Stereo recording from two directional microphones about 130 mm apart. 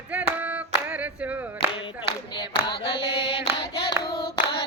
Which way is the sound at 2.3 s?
35° left (ahead or behind).